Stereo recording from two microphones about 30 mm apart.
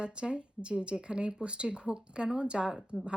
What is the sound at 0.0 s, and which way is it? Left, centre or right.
Speech, right.